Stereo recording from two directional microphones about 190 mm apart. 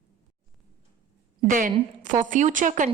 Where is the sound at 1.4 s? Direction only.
45° right (ahead or behind).